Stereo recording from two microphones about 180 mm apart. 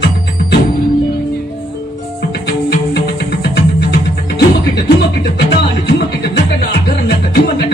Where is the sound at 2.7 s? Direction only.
65° left (ahead or behind).